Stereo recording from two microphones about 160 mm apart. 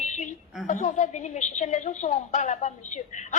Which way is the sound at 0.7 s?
50° left (ahead or behind).